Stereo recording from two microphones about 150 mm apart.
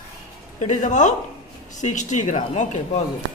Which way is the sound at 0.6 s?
55° left (ahead or behind).